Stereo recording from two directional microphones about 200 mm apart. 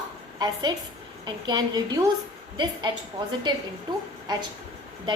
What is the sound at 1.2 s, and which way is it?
A woman's voice, 20° right (ahead or behind).